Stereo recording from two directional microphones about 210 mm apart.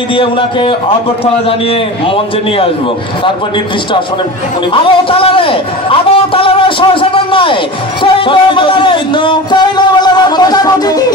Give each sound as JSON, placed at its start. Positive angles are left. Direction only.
{"t": 0.1, "sound": "speech", "side_deg": 25}
{"t": 4.8, "sound": "speech", "side_deg": 25}